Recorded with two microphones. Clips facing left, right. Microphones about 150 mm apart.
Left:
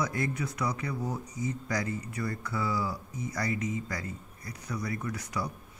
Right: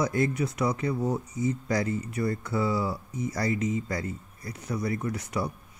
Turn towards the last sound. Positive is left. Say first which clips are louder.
# right 4 dB
turn(degrees=-25)  # may be behind; listen again after turning